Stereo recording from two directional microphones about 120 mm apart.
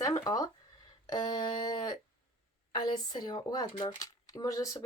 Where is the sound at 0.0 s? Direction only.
30° left (ahead or behind).